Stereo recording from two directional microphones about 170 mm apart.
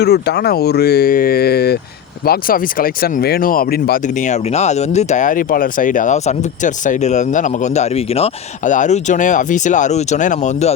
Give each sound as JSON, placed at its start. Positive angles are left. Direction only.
{"t": 0.0, "sound": "speech", "side_deg": 75}